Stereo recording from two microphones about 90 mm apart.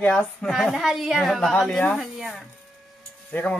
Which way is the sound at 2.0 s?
Centre (ahead or behind).